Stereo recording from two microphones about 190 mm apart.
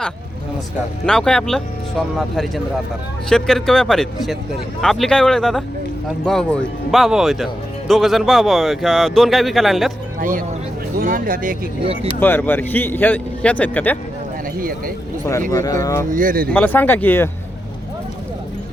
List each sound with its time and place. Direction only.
1.0 s speech: 5° left (ahead or behind)
10.2 s speech: 45° right (ahead or behind)
12.2 s speech: 10° left (ahead or behind)
14.6 s speech: 50° right (ahead or behind)
15.2 s speech: 15° left (ahead or behind)
16.0 s speech: 45° right (ahead or behind)
16.5 s speech: 10° left (ahead or behind)